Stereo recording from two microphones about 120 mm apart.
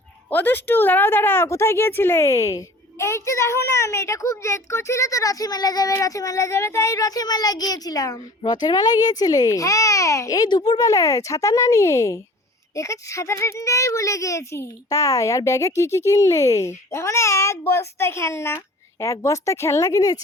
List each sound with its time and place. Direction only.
0.3 s speech: 15° left (ahead or behind)